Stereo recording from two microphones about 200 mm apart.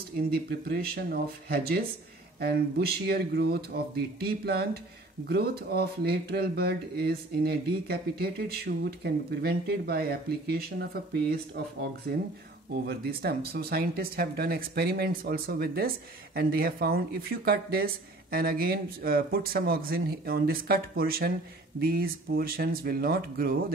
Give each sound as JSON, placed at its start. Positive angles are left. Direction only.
{"t": 0.3, "sound": "speech", "side_deg": -50}
{"t": 12.8, "sound": "speech", "side_deg": -55}